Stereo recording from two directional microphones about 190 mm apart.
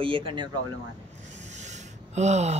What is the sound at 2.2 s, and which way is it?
Speech, 35° right (ahead or behind).